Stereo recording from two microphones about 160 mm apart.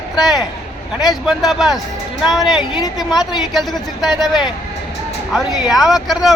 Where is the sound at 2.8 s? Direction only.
25° left (ahead or behind).